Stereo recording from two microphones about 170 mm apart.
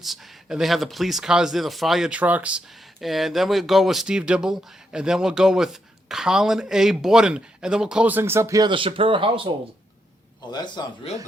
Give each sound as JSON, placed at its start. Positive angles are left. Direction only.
{"t": 0.0, "sound": "speech", "side_deg": 0}
{"t": 10.5, "sound": "a man's voice", "side_deg": 25}